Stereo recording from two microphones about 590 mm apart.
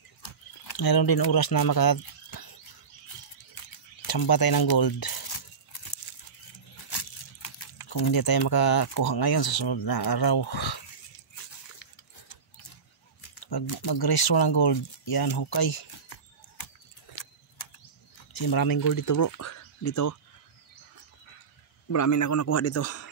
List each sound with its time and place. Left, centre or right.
0.2 s a sound: left
4.0 s speech: left
6.5 s a sound: left
7.9 s speech: left
13.3 s speech: left
18.3 s speech: left
21.8 s a man's voice: left